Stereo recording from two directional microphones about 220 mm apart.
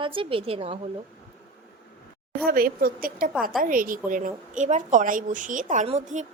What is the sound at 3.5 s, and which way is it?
A woman's voice, 40° right (ahead or behind).